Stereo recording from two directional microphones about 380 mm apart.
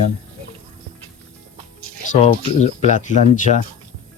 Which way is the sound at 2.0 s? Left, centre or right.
Centre.